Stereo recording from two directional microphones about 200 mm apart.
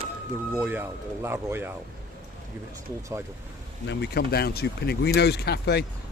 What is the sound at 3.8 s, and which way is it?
Speech, 55° left (ahead or behind).